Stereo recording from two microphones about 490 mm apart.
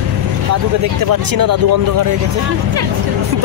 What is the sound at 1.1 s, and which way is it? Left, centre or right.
Speech, right.